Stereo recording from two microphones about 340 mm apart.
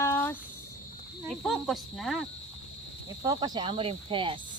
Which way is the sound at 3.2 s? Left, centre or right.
Centre.